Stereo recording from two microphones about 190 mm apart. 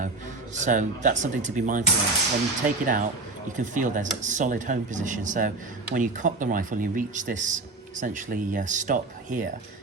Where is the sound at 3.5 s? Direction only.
40° right (ahead or behind).